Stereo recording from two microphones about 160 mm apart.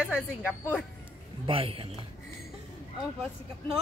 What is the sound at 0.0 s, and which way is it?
Speech, 5° right (ahead or behind).